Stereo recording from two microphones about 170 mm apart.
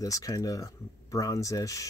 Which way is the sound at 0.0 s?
20° left (ahead or behind).